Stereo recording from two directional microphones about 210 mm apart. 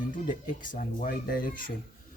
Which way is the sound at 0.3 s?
40° left (ahead or behind).